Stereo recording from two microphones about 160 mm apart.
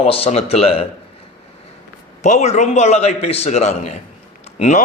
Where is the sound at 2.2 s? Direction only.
45° left (ahead or behind).